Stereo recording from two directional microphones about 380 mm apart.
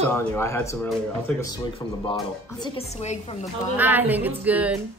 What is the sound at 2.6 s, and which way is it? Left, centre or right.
Speech, centre.